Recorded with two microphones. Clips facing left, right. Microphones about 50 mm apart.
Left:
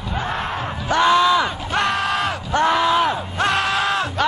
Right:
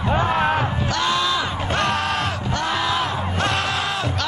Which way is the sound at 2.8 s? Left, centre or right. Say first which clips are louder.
Left 4 dB; centre.